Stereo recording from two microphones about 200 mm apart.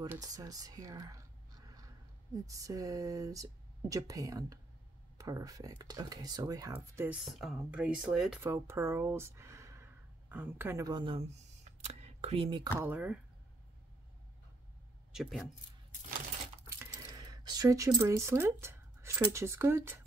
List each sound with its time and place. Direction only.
0.1 s speech: 15° right (ahead or behind)
2.4 s speech: 15° right (ahead or behind)
7.2 s speech: centre (ahead or behind)
8.4 s speech: 15° right (ahead or behind)
12.7 s speech: 10° right (ahead or behind)
15.1 s speech: 5° right (ahead or behind)
16.6 s speech: 15° right (ahead or behind)